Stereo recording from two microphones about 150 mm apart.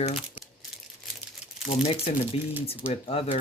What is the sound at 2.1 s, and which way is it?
Speech, 45° left (ahead or behind).